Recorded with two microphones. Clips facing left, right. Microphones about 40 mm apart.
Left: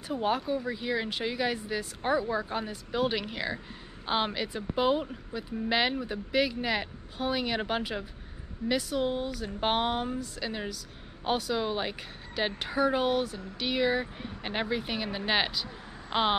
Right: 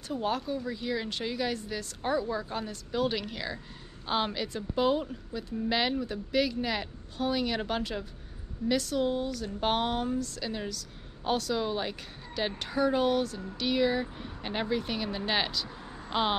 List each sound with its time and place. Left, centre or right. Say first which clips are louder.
0.1 s speech: left 2 dB; centre